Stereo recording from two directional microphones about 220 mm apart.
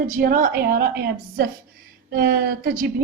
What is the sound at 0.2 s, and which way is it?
A woman's voice, 40° right (ahead or behind).